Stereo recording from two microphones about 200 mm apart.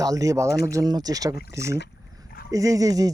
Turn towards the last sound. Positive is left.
turn(degrees=-15)  # may be behind; listen again after turning